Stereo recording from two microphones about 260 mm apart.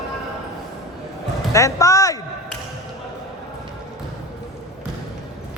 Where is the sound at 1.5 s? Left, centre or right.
Centre.